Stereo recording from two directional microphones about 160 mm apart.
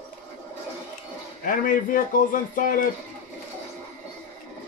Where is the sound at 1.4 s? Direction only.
60° left (ahead or behind).